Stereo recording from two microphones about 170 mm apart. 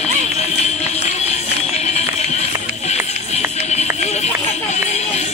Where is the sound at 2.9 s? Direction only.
40° left (ahead or behind).